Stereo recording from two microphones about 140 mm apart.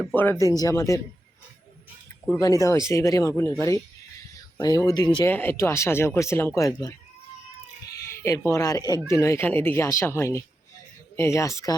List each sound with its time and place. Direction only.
0.0 s speech: 15° left (ahead or behind)
2.4 s speech: 20° left (ahead or behind)
4.8 s speech: 25° left (ahead or behind)
5.2 s speech: 15° left (ahead or behind)
7.9 s speech: 20° left (ahead or behind)